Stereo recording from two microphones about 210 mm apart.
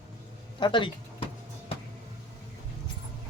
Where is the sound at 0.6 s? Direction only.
25° left (ahead or behind).